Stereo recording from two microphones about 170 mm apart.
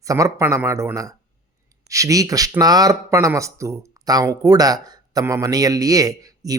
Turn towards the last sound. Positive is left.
turn(degrees=-20)  # may be behind; listen again after turning